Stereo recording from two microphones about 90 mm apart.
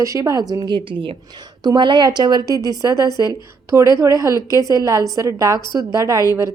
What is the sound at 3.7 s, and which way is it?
A woman's voice, 35° right (ahead or behind).